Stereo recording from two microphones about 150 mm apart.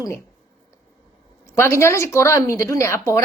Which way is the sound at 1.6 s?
20° left (ahead or behind).